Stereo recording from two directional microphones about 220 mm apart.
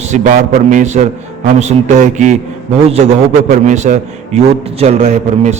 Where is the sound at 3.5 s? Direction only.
35° right (ahead or behind).